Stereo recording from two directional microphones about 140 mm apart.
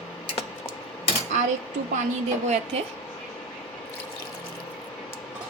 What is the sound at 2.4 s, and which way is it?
Speech, 55° right (ahead or behind).